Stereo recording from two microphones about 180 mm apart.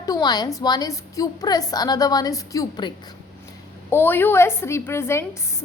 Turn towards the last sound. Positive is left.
turn(degrees=15)  # may be behind; listen again after turning